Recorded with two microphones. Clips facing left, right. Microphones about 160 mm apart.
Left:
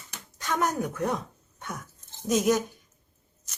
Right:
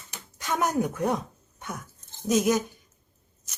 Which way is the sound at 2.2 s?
Centre (ahead or behind).